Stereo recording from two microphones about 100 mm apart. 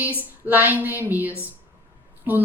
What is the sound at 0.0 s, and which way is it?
Speech, 15° right (ahead or behind).